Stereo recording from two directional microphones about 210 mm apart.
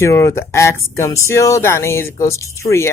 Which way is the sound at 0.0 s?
15° left (ahead or behind).